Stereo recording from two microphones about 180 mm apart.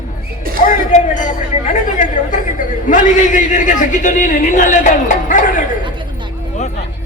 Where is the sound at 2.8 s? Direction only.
45° left (ahead or behind).